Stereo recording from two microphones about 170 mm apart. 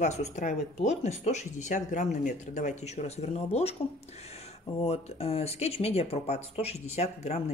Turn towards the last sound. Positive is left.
turn(degrees=40)  # may be behind; listen again after turning